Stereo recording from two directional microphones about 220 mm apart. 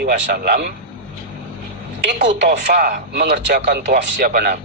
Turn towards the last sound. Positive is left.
turn(degrees=-40)  # may be behind; listen again after turning